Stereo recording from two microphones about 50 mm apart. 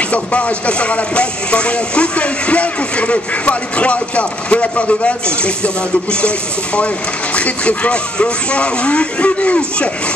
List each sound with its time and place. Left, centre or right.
0.1 s speech: left